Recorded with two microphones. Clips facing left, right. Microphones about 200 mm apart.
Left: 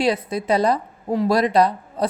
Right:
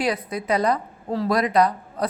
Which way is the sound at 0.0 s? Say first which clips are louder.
Left 4 dB; 25° left (ahead or behind).